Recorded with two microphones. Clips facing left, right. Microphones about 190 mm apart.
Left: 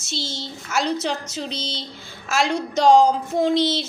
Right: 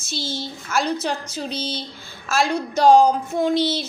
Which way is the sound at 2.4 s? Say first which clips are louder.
Right 1 dB; 20° left (ahead or behind).